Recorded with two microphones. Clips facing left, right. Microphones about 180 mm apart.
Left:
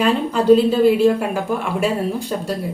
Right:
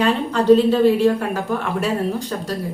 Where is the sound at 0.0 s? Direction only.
10° left (ahead or behind).